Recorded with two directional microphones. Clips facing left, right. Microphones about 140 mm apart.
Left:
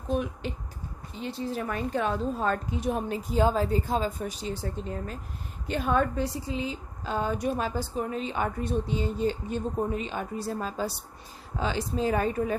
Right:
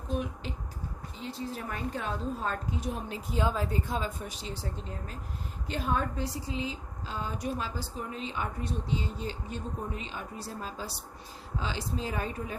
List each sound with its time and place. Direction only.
1.2 s a woman's voice: 70° left (ahead or behind)
3.3 s a woman's voice: 35° left (ahead or behind); by 12.5 s 55° left (ahead or behind)